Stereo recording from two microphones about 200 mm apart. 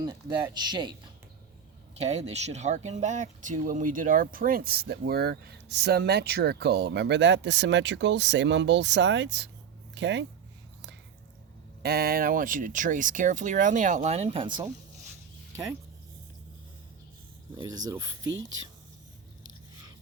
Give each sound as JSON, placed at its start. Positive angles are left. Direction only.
{"t": 0.0, "sound": "speech", "side_deg": -20}
{"t": 2.0, "sound": "speech", "side_deg": -35}
{"t": 11.8, "sound": "speech", "side_deg": -50}
{"t": 17.6, "sound": "speech", "side_deg": -15}